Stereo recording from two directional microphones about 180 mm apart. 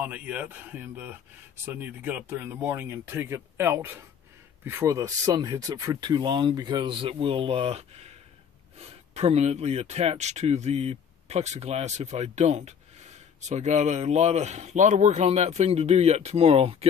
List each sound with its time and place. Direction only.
0.0 s speech: 10° right (ahead or behind); by 16.7 s 35° right (ahead or behind)